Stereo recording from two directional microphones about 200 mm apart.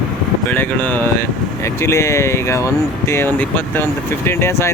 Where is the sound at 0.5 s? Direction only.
10° left (ahead or behind).